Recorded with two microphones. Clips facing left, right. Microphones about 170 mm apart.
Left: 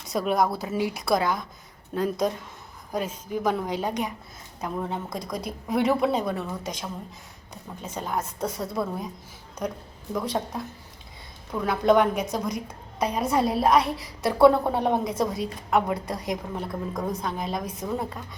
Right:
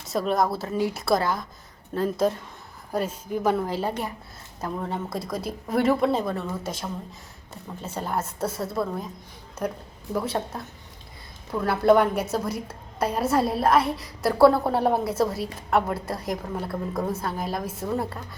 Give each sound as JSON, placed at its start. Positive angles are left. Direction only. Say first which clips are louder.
{"t": 0.0, "sound": "a woman's voice", "louder": "even", "side_deg": 0}
{"t": 7.9, "sound": "a woman's voice", "louder": "right 1 dB", "side_deg": -5}